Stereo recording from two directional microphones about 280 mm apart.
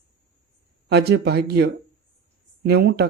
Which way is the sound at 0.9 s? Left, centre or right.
Right.